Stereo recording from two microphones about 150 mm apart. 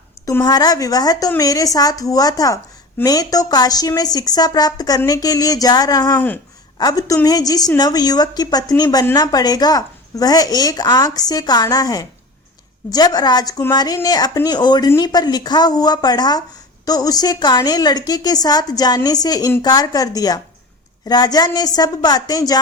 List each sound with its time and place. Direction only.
0.3 s a woman's voice: 25° left (ahead or behind)
6.1 s speech: 10° left (ahead or behind)
6.7 s a woman's voice: 25° left (ahead or behind)